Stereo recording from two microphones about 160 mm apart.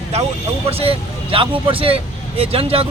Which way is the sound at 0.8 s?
35° right (ahead or behind).